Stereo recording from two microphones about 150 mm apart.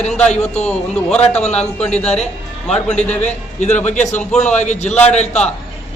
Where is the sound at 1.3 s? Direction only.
50° left (ahead or behind).